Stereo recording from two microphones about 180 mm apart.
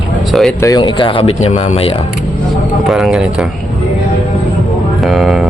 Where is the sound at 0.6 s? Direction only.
20° left (ahead or behind).